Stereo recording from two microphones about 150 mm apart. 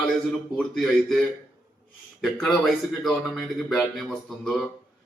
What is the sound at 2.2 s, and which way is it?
A man's voice, centre (ahead or behind).